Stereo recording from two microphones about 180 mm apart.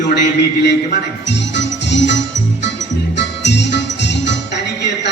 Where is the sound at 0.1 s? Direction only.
65° left (ahead or behind).